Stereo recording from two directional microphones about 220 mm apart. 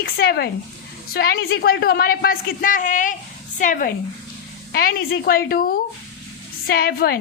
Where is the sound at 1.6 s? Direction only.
45° left (ahead or behind).